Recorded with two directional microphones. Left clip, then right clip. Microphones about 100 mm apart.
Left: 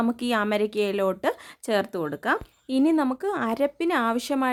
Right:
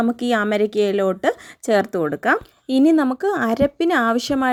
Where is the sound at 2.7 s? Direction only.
40° right (ahead or behind).